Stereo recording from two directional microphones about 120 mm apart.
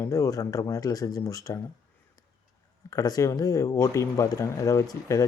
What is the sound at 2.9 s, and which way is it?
Speech, 30° left (ahead or behind).